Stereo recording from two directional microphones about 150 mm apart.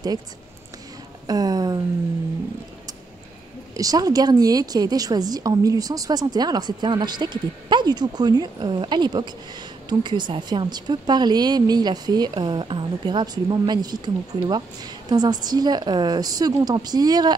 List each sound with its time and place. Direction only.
1.2 s speech: 25° right (ahead or behind)
3.7 s a woman's voice: 25° right (ahead or behind)